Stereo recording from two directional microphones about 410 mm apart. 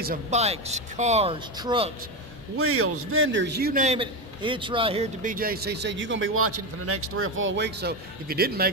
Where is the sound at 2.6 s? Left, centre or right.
Right.